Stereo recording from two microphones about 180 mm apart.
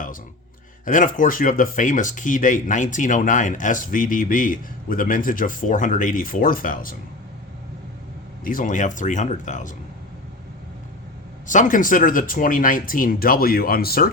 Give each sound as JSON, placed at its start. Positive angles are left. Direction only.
{"t": 0.9, "sound": "speech", "side_deg": 50}
{"t": 8.4, "sound": "speech", "side_deg": 45}
{"t": 11.4, "sound": "speech", "side_deg": 45}